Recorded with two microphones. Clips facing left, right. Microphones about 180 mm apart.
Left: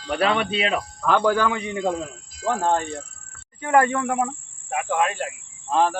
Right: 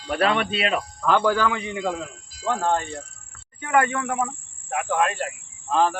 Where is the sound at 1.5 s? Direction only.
30° left (ahead or behind).